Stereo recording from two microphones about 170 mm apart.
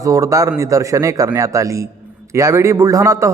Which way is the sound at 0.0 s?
20° right (ahead or behind).